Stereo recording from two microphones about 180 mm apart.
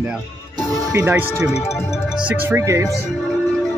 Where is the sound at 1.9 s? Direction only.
5° right (ahead or behind).